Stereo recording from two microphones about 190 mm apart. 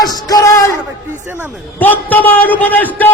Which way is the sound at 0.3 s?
20° left (ahead or behind).